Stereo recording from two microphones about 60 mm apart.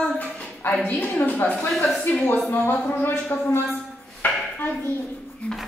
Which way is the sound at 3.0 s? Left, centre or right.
Left.